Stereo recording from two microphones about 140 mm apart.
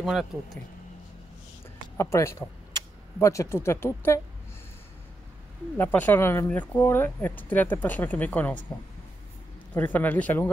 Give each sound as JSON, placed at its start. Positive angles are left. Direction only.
{"t": 0.0, "sound": "speech", "side_deg": 0}
{"t": 2.0, "sound": "speech", "side_deg": 20}
{"t": 5.8, "sound": "speech", "side_deg": 15}
{"t": 9.8, "sound": "speech", "side_deg": 10}